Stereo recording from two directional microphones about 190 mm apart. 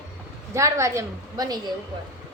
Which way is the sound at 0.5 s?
15° right (ahead or behind).